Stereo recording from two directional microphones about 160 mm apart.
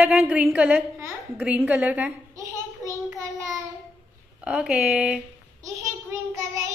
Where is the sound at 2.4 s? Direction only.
20° right (ahead or behind).